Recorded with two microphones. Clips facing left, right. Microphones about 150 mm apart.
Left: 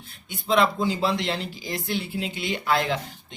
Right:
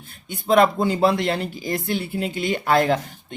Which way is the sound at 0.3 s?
50° right (ahead or behind).